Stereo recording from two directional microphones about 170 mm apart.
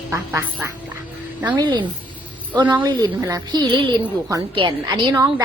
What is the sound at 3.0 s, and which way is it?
A woman's voice, 20° right (ahead or behind).